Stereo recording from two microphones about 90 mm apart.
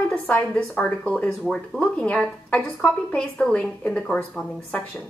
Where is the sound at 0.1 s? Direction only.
15° left (ahead or behind).